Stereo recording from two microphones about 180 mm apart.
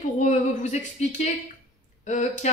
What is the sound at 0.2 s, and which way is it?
A woman's voice, 40° left (ahead or behind).